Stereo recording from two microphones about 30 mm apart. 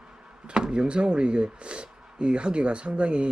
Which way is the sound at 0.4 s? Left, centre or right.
Right.